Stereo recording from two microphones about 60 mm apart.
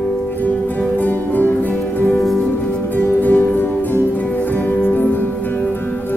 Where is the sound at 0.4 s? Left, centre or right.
Left.